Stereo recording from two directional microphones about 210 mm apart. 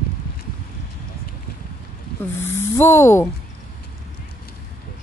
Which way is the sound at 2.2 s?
10° left (ahead or behind).